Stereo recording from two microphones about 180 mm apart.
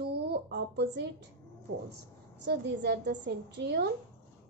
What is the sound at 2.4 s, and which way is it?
A woman's voice, 70° right (ahead or behind).